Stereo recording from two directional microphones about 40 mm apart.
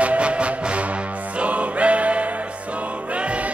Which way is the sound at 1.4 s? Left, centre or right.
Right.